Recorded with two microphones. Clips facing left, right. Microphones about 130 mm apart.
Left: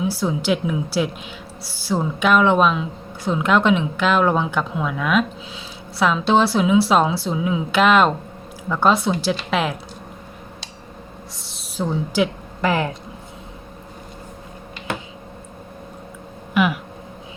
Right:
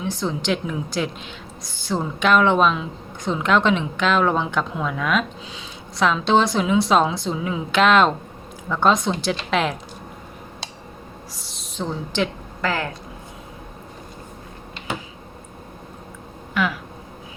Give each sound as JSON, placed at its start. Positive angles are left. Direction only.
{"t": 0.0, "sound": "speech", "side_deg": 5}
{"t": 11.3, "sound": "a woman's voice", "side_deg": 0}
{"t": 12.6, "sound": "speech", "side_deg": 20}
{"t": 16.6, "sound": "speech", "side_deg": 15}